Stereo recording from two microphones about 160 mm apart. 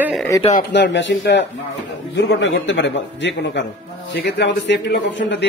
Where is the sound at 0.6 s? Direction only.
90° left.